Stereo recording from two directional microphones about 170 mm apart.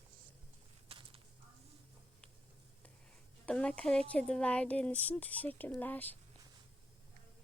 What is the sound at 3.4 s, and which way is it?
Speech, 5° left (ahead or behind).